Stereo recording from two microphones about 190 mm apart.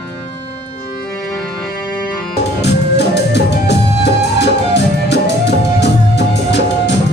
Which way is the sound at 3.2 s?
65° left (ahead or behind).